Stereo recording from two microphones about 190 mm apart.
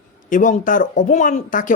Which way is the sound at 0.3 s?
40° left (ahead or behind).